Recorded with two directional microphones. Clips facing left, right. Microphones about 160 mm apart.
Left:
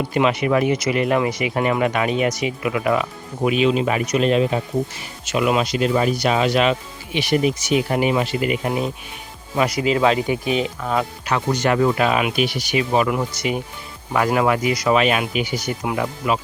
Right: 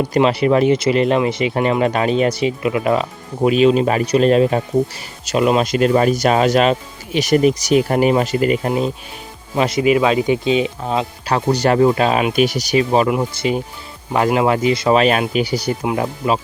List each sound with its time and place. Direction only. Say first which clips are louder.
0.0 s speech: right 4 dB; 35° right (ahead or behind)
5.7 s speech: right 5 dB; 50° right (ahead or behind); by 12.3 s 30° right (ahead or behind)
12.4 s speech: right 5 dB; 40° right (ahead or behind)